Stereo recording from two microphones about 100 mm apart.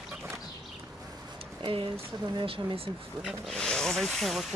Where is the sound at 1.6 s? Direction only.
60° right (ahead or behind).